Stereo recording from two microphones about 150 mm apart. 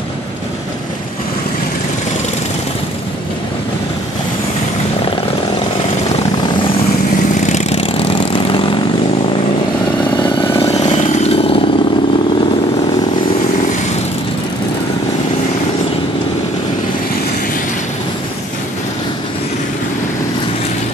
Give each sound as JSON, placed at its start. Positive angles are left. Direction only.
{"t": 7.3, "sound": "vehicle", "side_deg": 55}
{"t": 7.8, "sound": "vehicle", "side_deg": 35}
{"t": 10.9, "sound": "chainsaw", "side_deg": 40}